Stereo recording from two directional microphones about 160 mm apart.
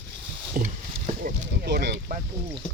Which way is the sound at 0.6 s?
60° right (ahead or behind).